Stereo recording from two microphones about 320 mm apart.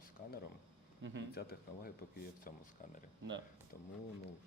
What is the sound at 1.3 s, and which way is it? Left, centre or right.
Speech, left.